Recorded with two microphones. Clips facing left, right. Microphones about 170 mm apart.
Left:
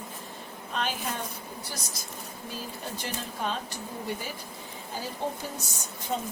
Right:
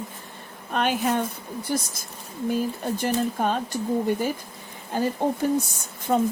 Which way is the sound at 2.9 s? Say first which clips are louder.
Right 13 dB; 50° right (ahead or behind).